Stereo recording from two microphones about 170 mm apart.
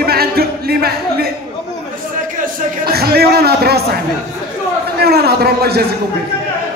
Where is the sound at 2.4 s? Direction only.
65° right (ahead or behind).